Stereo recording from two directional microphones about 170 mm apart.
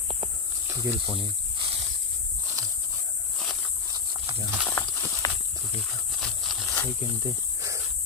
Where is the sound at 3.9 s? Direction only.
30° right (ahead or behind).